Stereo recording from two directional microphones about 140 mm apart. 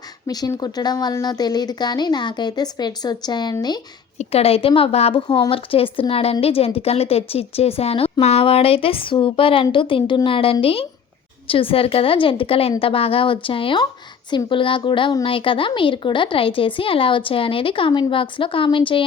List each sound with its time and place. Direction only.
0.3 s speech: 25° left (ahead or behind)
4.2 s a woman's voice: 45° left (ahead or behind)